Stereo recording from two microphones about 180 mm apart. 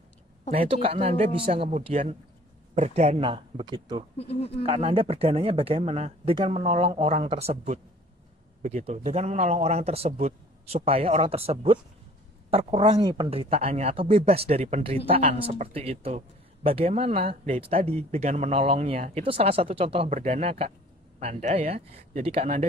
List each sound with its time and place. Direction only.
0.5 s speech: 35° right (ahead or behind)
4.2 s speech: 35° left (ahead or behind)
4.6 s speech: 30° right (ahead or behind)